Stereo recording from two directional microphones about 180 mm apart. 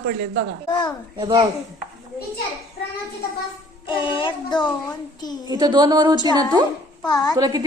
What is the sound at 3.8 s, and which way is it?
Child singing, 25° left (ahead or behind).